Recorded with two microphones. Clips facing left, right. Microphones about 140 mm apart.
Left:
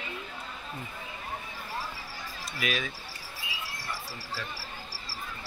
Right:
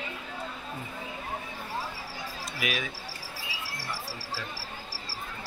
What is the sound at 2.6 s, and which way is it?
Speech, 15° right (ahead or behind).